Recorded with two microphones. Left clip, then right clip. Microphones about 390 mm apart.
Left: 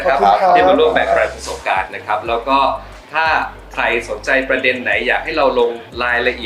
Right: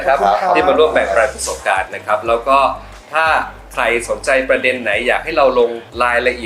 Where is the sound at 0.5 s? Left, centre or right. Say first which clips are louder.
Left 1 dB; right.